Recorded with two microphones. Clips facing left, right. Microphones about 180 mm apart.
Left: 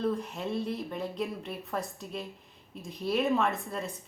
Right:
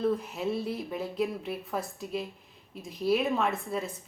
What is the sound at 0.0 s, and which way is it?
Speech, 5° right (ahead or behind).